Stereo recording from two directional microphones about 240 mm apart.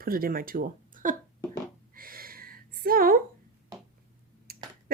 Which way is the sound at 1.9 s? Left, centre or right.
Right.